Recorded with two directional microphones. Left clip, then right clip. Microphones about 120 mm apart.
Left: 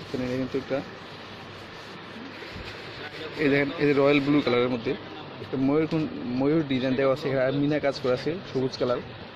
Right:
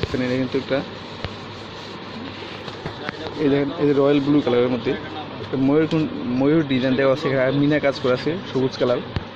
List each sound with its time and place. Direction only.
0.2 s speech: 10° left (ahead or behind)
3.4 s speech: 20° left (ahead or behind)